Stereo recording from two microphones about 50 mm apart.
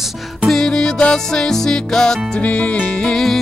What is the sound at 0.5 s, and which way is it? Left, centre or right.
Music, centre.